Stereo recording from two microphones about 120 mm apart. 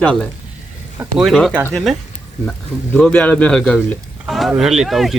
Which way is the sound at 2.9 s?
10° left (ahead or behind).